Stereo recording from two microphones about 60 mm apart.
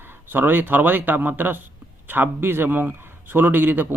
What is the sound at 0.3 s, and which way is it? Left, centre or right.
Speech, right.